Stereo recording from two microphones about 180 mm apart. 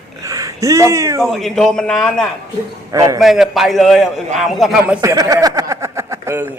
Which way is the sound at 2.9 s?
20° right (ahead or behind).